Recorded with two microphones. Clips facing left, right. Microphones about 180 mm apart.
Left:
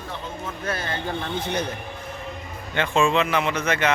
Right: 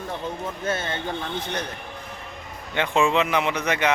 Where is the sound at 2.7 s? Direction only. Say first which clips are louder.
Even; 15° right (ahead or behind).